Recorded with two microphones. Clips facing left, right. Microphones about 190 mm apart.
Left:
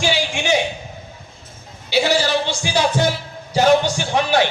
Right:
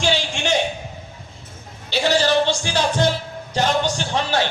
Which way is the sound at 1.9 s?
10° left (ahead or behind).